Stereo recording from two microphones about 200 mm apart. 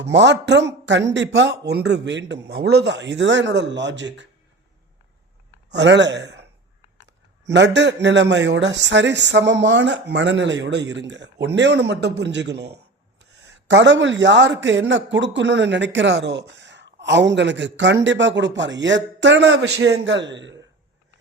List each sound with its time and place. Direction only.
0.0 s a man's voice: 60° right (ahead or behind)
5.7 s a man's voice: 60° right (ahead or behind)
7.5 s a man's voice: 60° right (ahead or behind)